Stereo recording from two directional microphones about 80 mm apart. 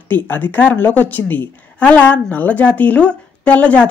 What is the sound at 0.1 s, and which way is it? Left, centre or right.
A woman's voice, left.